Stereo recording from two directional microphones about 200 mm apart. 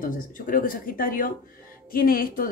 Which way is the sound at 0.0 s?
45° left (ahead or behind).